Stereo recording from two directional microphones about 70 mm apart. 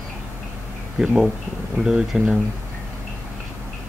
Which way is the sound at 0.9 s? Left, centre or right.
Centre.